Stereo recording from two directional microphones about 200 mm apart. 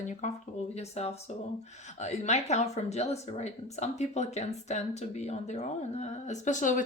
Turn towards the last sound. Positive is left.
turn(degrees=40)  # may be behind; listen again after turning